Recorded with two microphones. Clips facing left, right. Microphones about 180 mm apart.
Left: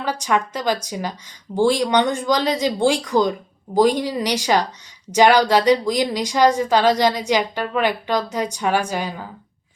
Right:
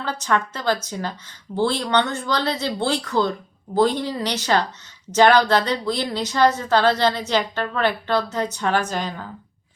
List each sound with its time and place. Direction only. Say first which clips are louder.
0.0 s a woman's voice: left 2 dB; 15° left (ahead or behind)